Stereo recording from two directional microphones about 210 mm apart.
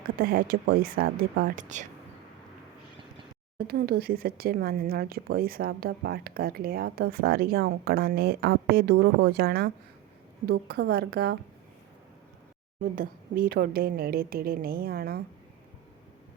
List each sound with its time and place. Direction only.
0.2 s speech: 45° right (ahead or behind)
3.6 s speech: 45° right (ahead or behind)
12.8 s speech: 40° right (ahead or behind)